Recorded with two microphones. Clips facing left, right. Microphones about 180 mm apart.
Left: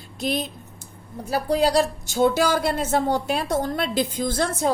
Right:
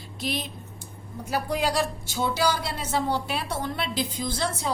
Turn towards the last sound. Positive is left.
turn(degrees=50)  # may be behind; listen again after turning